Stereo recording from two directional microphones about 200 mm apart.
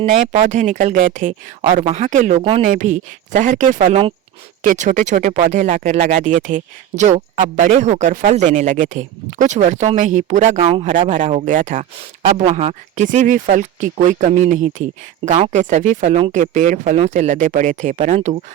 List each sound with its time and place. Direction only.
0.0 s speech: 40° right (ahead or behind)
11.0 s speech: 40° right (ahead or behind)